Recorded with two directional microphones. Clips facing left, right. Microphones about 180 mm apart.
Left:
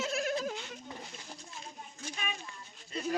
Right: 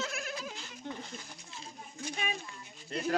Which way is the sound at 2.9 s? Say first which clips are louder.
Right 2 dB; 65° right (ahead or behind).